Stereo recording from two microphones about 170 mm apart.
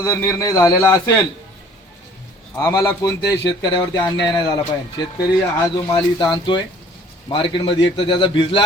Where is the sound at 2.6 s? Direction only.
20° left (ahead or behind).